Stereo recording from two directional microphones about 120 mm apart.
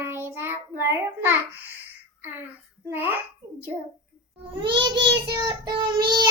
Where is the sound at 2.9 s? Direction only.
15° right (ahead or behind).